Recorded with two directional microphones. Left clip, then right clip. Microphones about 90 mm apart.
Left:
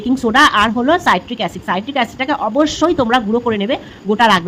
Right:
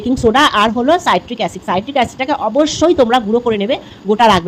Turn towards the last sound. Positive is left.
turn(degrees=-15)  # may be behind; listen again after turning